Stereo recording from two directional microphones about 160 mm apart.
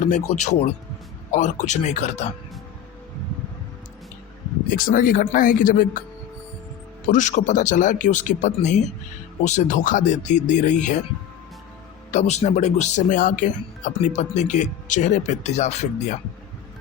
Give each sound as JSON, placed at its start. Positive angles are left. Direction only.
{"t": 0.3, "sound": "speech", "side_deg": 45}
{"t": 4.7, "sound": "speech", "side_deg": 60}
{"t": 7.1, "sound": "speech", "side_deg": 50}
{"t": 12.1, "sound": "speech", "side_deg": 45}